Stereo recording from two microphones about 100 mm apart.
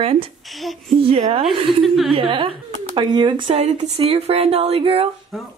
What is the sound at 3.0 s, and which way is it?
Speech, 50° right (ahead or behind).